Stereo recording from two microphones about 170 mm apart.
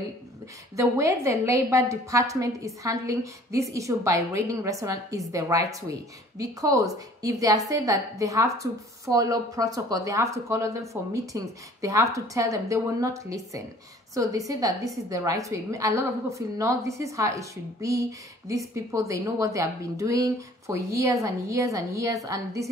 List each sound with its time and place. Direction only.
0.7 s a woman's voice: 15° right (ahead or behind)